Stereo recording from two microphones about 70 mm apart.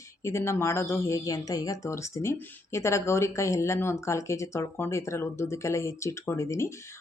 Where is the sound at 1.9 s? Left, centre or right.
Left.